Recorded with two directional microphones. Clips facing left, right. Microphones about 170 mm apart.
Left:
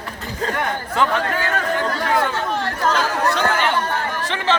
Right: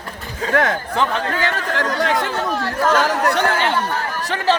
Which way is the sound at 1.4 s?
90° right.